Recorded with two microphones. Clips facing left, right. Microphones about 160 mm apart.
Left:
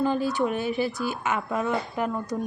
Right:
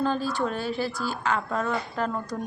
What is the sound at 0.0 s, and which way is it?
A woman's voice, 15° left (ahead or behind).